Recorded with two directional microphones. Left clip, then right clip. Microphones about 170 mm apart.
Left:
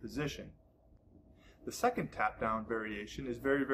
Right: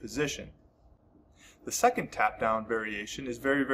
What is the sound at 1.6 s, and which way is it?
Speech, 10° right (ahead or behind).